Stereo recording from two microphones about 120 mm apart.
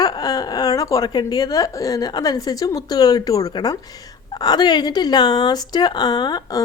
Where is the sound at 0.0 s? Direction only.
35° left (ahead or behind).